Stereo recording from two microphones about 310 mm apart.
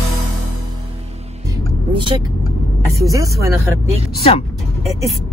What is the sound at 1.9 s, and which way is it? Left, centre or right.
Speech, centre.